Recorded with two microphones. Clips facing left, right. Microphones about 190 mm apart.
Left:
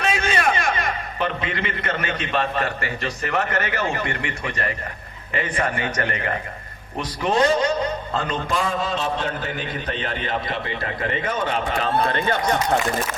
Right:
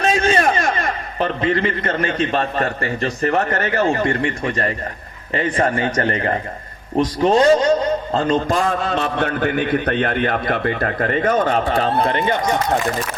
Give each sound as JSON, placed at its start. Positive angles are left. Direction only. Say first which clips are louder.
{"t": 0.0, "sound": "a man's voice", "louder": "right 5 dB", "side_deg": -35}
{"t": 12.0, "sound": "speech", "louder": "right 3 dB", "side_deg": -20}